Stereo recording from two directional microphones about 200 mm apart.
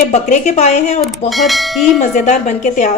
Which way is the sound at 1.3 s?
Centre (ahead or behind).